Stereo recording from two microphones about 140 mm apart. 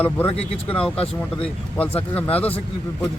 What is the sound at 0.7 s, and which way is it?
Speech, 10° left (ahead or behind).